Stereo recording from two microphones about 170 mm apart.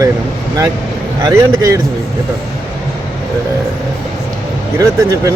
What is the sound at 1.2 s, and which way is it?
Speech, 20° right (ahead or behind).